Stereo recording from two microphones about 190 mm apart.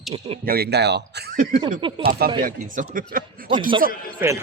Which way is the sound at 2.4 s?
45° right (ahead or behind).